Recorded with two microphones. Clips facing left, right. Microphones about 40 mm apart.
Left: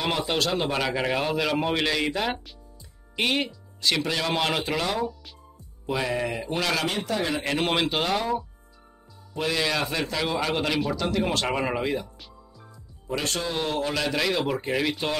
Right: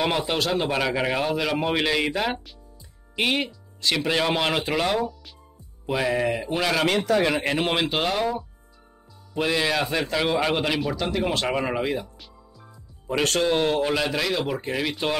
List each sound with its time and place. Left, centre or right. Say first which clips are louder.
0.0 s a man's voice: right 2 dB; centre
6.9 s a man's voice: right 6 dB; right
7.4 s a man's voice: right 1 dB; centre
9.3 s a man's voice: right 3 dB; centre
13.2 s a man's voice: right 8 dB; right
13.6 s speech: right 5 dB; right
14.1 s a man's voice: even; centre